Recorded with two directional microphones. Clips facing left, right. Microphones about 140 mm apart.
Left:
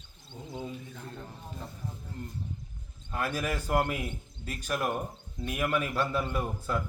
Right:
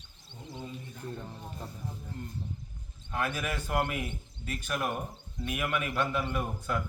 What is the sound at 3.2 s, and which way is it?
A man's voice, 40° left (ahead or behind).